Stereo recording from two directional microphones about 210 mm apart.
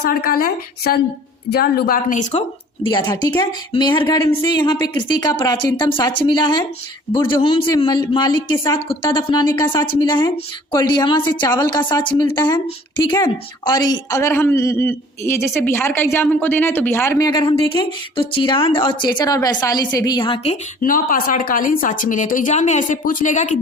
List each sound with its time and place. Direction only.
0.0 s speech: 45° left (ahead or behind)
2.8 s a woman's voice: 20° left (ahead or behind); by 23.6 s 35° left (ahead or behind)